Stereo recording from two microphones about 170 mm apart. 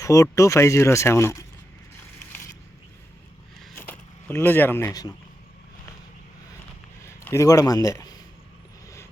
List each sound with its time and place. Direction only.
0.0 s speech: 20° left (ahead or behind)
3.8 s speech: 15° left (ahead or behind)
7.1 s a man's voice: 15° left (ahead or behind)